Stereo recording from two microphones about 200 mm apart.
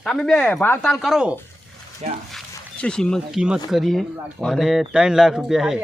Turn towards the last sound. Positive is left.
turn(degrees=0)  # may be behind; listen again after turning